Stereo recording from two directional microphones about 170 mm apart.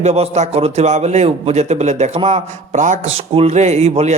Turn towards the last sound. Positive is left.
turn(degrees=-40)  # may be behind; listen again after turning